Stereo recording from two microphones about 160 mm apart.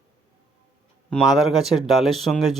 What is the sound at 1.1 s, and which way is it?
Speech, centre (ahead or behind).